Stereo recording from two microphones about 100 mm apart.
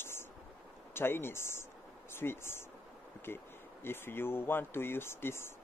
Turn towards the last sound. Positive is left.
turn(degrees=25)  # may be behind; listen again after turning